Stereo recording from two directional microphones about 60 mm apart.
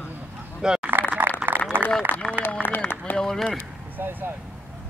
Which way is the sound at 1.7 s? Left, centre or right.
Right.